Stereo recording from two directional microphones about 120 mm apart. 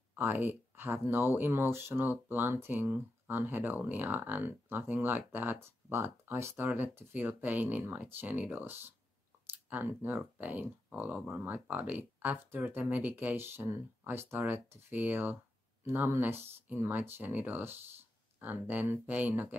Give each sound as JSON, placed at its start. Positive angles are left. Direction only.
{"t": 0.1, "sound": "speech", "side_deg": -15}